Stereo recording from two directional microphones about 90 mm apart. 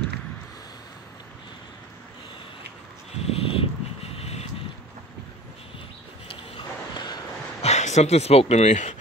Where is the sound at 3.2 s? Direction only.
90° left.